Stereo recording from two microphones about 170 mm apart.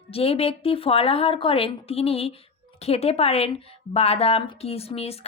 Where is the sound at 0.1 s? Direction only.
35° left (ahead or behind).